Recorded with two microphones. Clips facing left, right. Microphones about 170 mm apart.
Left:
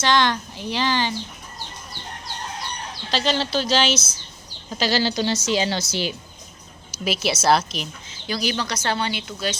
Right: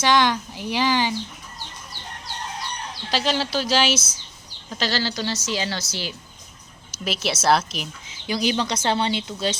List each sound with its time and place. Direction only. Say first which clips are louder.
0.0 s a woman's voice: right 1 dB; 10° right (ahead or behind)
3.1 s a woman's voice: left 1 dB; 10° right (ahead or behind)
4.7 s a woman's voice: left 4 dB; 10° left (ahead or behind)
7.0 s a woman's voice: left 2 dB; 5° left (ahead or behind)
8.3 s speech: right 2 dB; 20° right (ahead or behind)